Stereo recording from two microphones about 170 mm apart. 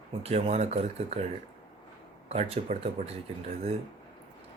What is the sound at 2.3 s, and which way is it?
Speech, 35° right (ahead or behind).